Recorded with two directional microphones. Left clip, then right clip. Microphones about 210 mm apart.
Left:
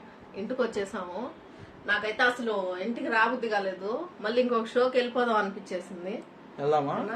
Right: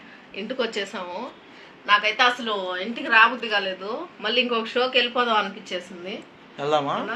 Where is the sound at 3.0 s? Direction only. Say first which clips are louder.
Right 8 dB; 5° left (ahead or behind).